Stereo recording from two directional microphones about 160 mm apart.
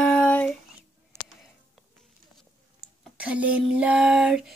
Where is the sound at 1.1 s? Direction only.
15° right (ahead or behind).